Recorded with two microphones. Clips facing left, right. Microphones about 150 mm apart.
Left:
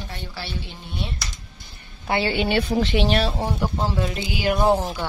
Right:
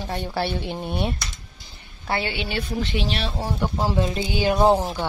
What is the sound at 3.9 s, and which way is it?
A woman's voice, 25° right (ahead or behind).